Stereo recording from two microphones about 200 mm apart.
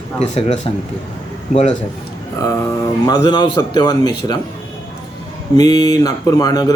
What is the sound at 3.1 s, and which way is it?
A man's voice, 20° left (ahead or behind).